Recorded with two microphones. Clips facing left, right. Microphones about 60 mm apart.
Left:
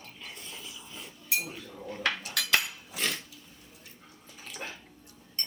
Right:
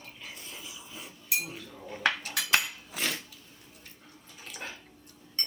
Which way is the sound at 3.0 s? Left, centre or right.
Centre.